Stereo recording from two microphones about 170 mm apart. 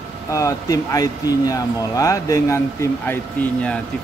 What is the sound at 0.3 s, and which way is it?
Speech, 20° left (ahead or behind).